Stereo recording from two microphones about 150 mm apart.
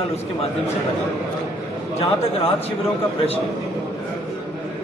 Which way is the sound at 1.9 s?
40° left (ahead or behind).